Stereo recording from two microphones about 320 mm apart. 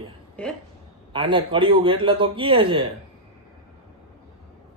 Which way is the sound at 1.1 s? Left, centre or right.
Centre.